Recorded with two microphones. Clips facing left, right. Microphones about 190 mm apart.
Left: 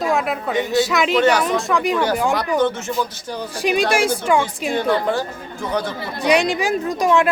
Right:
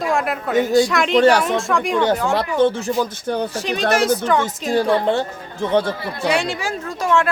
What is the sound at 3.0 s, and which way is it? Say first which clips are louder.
Speech: right 5 dB; 55° right (ahead or behind).